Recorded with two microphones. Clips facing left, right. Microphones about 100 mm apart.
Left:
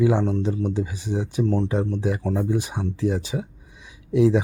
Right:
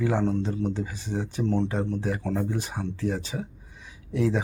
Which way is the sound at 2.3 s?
15° left (ahead or behind).